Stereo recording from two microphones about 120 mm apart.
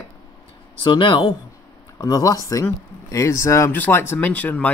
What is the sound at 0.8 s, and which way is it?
Speech, 45° left (ahead or behind).